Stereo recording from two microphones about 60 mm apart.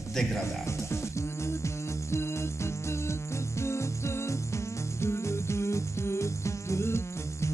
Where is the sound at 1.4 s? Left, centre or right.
Left.